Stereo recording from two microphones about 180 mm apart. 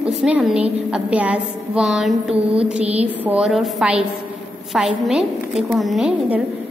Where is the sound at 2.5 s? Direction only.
35° right (ahead or behind).